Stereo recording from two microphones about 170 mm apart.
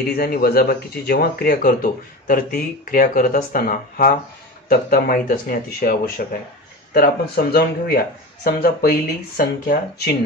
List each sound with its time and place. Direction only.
0.1 s speech: 60° left (ahead or behind)